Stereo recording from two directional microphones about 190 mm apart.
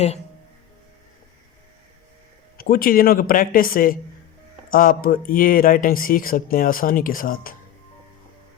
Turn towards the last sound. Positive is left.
turn(degrees=50)  # may be behind; listen again after turning